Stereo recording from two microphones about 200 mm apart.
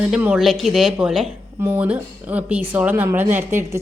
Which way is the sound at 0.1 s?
5° right (ahead or behind).